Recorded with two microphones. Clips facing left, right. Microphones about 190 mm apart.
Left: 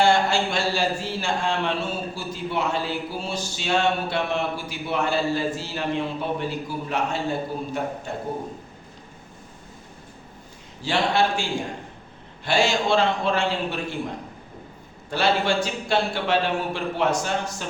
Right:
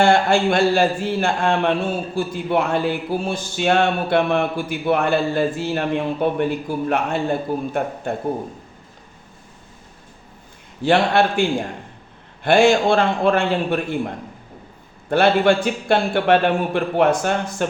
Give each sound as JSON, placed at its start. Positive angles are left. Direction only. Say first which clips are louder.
{"t": 0.0, "sound": "speech", "louder": "right 4 dB", "side_deg": -55}
{"t": 10.8, "sound": "speech", "louder": "right 6 dB", "side_deg": -60}
{"t": 12.5, "sound": "speech", "louder": "right 7 dB", "side_deg": -55}
{"t": 15.1, "sound": "speech", "louder": "right 7 dB", "side_deg": -55}